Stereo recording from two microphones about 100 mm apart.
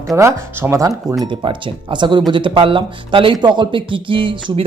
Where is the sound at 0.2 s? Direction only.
25° right (ahead or behind).